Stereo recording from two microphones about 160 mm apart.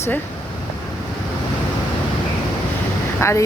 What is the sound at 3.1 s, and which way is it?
Speech, 15° left (ahead or behind).